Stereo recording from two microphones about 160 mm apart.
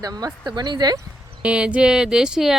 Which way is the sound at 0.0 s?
25° right (ahead or behind).